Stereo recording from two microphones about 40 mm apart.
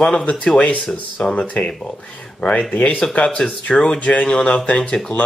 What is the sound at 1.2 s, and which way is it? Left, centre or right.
Speech, left.